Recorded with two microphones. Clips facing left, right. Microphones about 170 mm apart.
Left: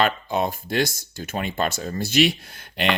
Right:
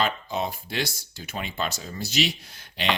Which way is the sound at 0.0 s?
55° left (ahead or behind).